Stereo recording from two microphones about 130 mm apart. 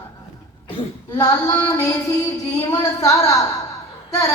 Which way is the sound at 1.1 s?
30° left (ahead or behind).